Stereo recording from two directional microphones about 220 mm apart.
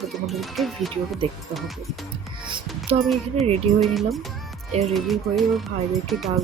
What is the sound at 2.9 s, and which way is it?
Speech, 25° right (ahead or behind).